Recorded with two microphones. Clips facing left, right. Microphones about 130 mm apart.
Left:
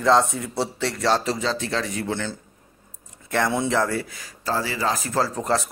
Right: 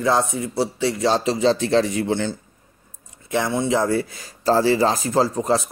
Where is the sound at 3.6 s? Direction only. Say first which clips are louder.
Right 3 dB; 20° right (ahead or behind).